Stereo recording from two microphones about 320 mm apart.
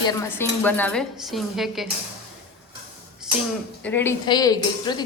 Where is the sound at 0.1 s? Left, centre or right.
Centre.